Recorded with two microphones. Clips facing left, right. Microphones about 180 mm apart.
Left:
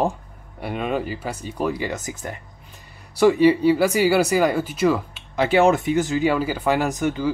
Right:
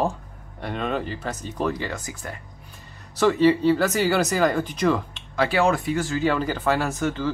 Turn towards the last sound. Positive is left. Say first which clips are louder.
# left 3 dB
turn(degrees=15)  # may be behind; listen again after turning